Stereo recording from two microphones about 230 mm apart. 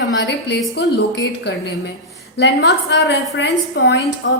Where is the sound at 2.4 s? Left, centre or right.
Left.